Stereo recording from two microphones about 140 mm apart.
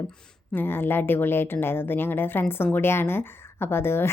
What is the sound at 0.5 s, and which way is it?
Speech, 15° left (ahead or behind).